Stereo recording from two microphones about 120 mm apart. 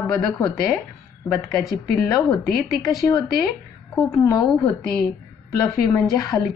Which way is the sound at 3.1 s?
30° left (ahead or behind).